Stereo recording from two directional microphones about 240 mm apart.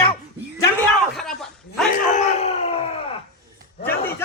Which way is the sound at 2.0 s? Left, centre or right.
Left.